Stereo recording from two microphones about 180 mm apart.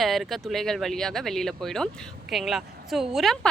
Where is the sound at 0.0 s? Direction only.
Centre (ahead or behind).